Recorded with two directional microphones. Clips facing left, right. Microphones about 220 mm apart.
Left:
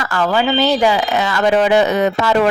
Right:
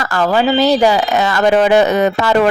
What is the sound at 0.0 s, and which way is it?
Speech, 40° right (ahead or behind).